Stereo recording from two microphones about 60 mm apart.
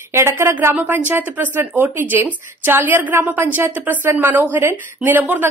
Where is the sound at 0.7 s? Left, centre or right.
Right.